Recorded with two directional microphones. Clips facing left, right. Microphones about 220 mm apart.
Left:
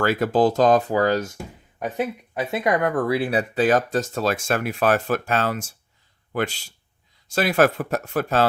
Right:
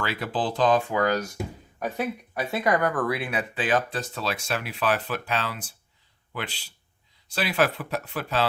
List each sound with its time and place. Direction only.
0.0 s speech: 45° left (ahead or behind)